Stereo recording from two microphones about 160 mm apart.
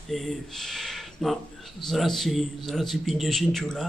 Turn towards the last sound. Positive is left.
turn(degrees=0)  # may be behind; listen again after turning